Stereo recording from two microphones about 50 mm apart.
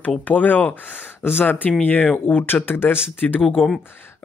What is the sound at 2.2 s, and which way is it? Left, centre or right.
Speech, left.